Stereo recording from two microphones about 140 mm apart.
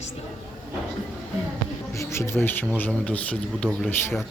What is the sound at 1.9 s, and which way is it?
Speech, 20° left (ahead or behind).